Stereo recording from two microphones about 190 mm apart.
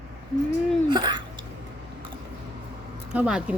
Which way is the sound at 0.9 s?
25° right (ahead or behind).